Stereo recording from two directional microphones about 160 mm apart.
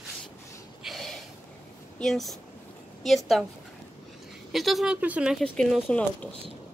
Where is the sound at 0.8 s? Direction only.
Centre (ahead or behind).